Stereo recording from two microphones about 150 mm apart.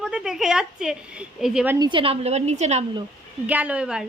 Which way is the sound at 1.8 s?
35° right (ahead or behind).